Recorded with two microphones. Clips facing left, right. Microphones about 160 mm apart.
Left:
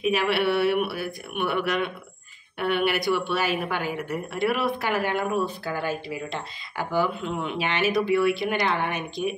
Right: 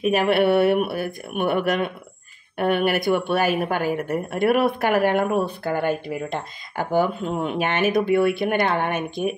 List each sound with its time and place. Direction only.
0.0 s a woman's voice: 50° right (ahead or behind)